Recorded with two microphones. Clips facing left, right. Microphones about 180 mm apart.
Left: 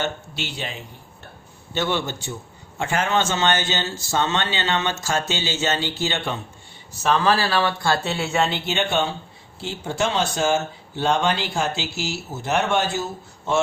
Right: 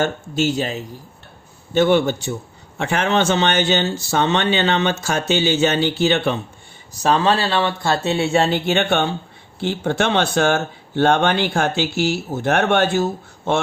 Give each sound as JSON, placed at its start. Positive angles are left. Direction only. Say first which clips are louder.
{"t": 0.0, "sound": "speech", "louder": "right 8 dB", "side_deg": -45}
{"t": 1.7, "sound": "speech", "louder": "right 9 dB", "side_deg": -55}
{"t": 7.0, "sound": "speech", "louder": "right 3 dB", "side_deg": -30}